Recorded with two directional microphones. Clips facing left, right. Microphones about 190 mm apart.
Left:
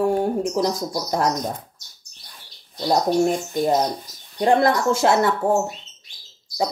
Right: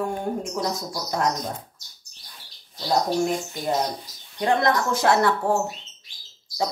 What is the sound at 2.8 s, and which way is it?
Speech, 30° left (ahead or behind).